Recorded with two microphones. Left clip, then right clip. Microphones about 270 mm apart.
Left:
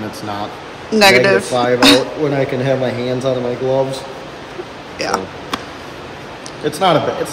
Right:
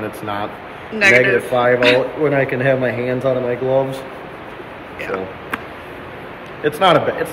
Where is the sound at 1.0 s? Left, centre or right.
Centre.